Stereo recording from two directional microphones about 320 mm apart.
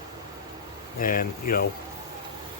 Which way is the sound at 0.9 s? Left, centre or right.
Left.